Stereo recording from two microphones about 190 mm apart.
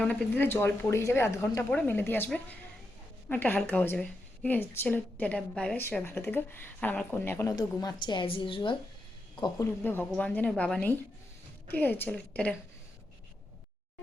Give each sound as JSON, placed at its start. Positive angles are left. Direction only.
{"t": 0.0, "sound": "a woman's voice", "side_deg": 5}
{"t": 9.8, "sound": "a woman's voice", "side_deg": 10}